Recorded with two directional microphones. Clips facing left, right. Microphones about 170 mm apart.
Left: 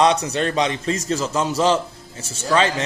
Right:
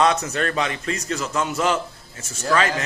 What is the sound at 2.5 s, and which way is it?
Speech, 25° left (ahead or behind).